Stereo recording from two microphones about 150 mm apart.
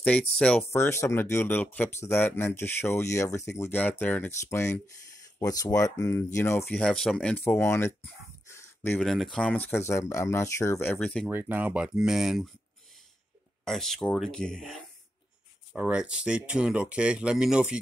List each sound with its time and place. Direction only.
0.4 s speech: 5° left (ahead or behind)
6.8 s speech: 5° left (ahead or behind)
8.5 s a sound: 15° left (ahead or behind)
9.0 s speech: centre (ahead or behind)
11.2 s speech: 10° right (ahead or behind)
13.7 s speech: centre (ahead or behind)
15.7 s speech: 5° right (ahead or behind)